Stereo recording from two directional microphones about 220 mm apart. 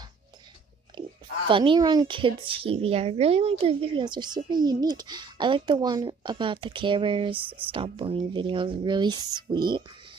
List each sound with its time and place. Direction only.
1.0 s oink: 20° right (ahead or behind)
1.5 s speech: 25° right (ahead or behind)